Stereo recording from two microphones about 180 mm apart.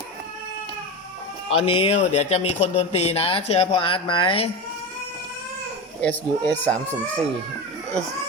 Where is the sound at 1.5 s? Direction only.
30° left (ahead or behind).